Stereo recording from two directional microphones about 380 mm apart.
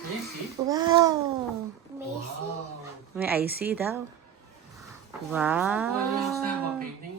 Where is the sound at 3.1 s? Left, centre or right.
Centre.